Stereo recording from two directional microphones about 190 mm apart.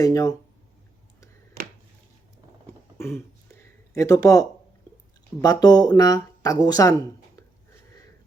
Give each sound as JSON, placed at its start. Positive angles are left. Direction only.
{"t": 0.0, "sound": "speech", "side_deg": 15}
{"t": 3.0, "sound": "a sound", "side_deg": 15}
{"t": 5.4, "sound": "speech", "side_deg": 20}